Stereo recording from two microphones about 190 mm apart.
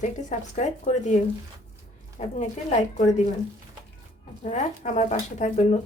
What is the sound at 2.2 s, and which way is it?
Speech, 35° left (ahead or behind).